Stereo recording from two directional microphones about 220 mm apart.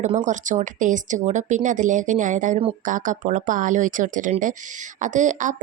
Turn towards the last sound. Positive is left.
turn(degrees=-35)  # may be behind; listen again after turning